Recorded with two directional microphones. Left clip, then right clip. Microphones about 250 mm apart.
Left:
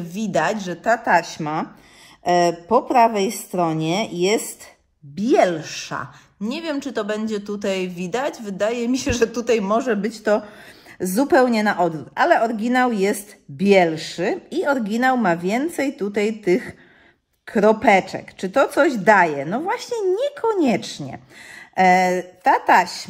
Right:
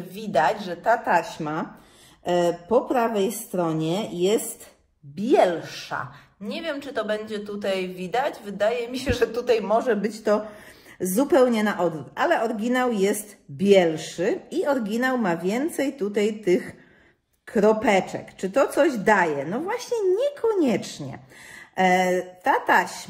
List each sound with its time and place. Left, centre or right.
0.1 s a woman's voice: left
5.2 s a woman's voice: left